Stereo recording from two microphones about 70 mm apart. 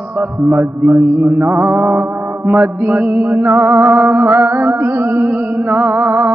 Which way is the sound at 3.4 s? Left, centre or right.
Right.